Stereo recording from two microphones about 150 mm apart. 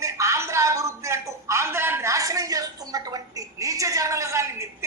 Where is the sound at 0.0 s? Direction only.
20° right (ahead or behind).